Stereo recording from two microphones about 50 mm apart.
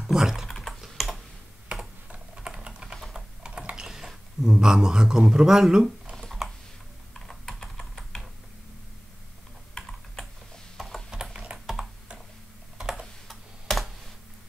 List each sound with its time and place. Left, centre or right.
0.0 s typing: centre
0.5 s typing: centre
2.0 s typing: centre
3.0 s typing: centre
3.4 s typing: centre
3.8 s speech: centre
6.2 s typing: centre
7.2 s computer keyboard: centre
11.1 s a sound: centre
11.5 s computer keyboard: centre
12.7 s typing: centre
13.3 s tick-tock: centre